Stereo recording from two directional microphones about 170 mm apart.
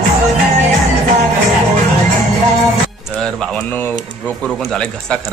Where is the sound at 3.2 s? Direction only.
5° left (ahead or behind).